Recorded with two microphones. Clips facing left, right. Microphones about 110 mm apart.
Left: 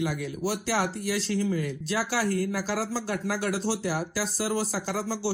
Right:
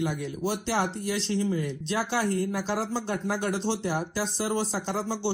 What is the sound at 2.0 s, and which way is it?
Speech, 5° left (ahead or behind).